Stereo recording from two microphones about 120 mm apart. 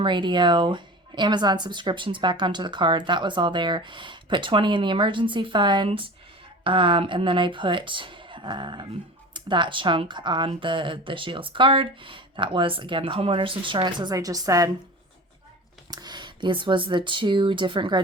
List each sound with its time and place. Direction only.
0.0 s a woman's voice: 40° right (ahead or behind)
15.9 s speech: 35° right (ahead or behind)